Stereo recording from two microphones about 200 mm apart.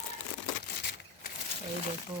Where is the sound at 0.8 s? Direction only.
55° left (ahead or behind).